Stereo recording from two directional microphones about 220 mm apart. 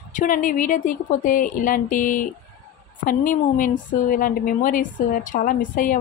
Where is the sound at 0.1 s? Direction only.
35° left (ahead or behind).